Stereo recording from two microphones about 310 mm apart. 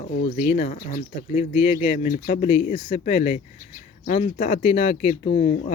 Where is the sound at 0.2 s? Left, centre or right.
Left.